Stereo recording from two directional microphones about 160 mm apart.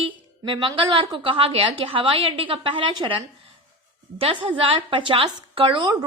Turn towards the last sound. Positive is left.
turn(degrees=-30)  # may be behind; listen again after turning